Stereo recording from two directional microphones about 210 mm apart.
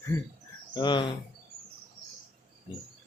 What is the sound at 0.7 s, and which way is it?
Speech, 20° left (ahead or behind).